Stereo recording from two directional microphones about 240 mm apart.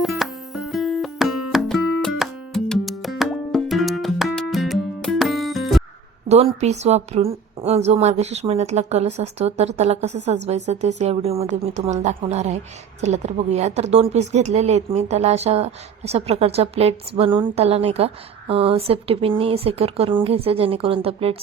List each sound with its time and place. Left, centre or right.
0.0 s music: centre
6.2 s speech: right